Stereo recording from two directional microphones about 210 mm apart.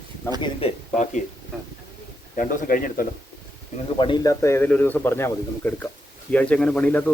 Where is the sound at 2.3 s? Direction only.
40° left (ahead or behind).